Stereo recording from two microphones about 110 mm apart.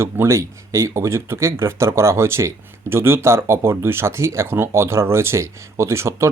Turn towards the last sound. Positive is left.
turn(degrees=-25)  # may be behind; listen again after turning